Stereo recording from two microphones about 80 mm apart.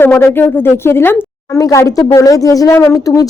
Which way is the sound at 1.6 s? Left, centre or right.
Left.